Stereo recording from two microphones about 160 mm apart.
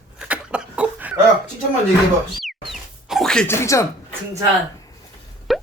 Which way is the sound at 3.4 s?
15° left (ahead or behind).